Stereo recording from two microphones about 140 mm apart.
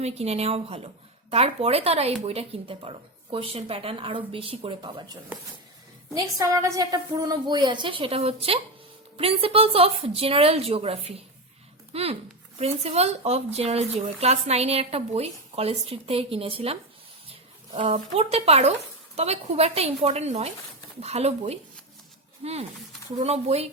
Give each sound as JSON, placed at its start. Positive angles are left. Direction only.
{"t": 0.0, "sound": "a woman's voice", "side_deg": -50}
{"t": 6.1, "sound": "a woman's voice", "side_deg": -25}
{"t": 17.7, "sound": "speech", "side_deg": -45}